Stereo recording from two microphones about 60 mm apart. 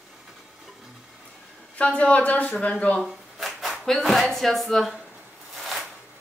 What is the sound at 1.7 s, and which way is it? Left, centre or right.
Speech, left.